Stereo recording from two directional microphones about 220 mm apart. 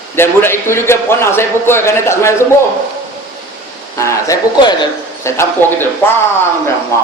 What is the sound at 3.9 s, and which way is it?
A man's voice, 15° left (ahead or behind).